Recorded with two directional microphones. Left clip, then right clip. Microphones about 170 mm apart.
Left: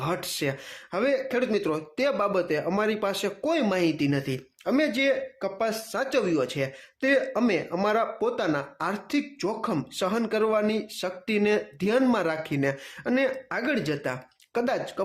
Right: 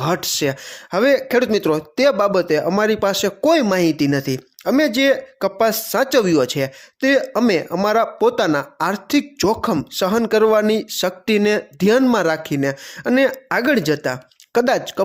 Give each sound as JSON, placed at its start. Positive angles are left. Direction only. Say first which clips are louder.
{"t": 0.0, "sound": "speech", "louder": "right 9 dB", "side_deg": -40}